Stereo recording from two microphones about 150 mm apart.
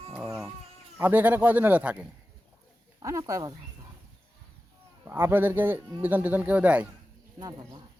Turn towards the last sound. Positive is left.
turn(degrees=-25)  # may be behind; listen again after turning